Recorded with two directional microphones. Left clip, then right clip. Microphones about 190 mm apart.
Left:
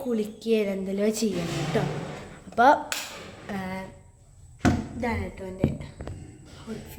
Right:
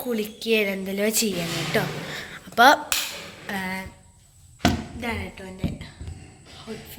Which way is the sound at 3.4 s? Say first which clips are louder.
Right 5 dB; 5° left (ahead or behind).